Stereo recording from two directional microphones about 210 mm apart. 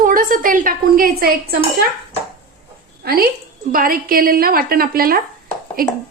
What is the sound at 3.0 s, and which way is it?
A woman's voice, 45° right (ahead or behind).